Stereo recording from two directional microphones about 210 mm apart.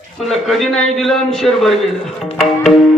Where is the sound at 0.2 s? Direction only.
Centre (ahead or behind).